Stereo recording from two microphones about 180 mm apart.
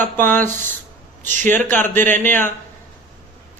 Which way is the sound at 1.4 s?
45° right (ahead or behind).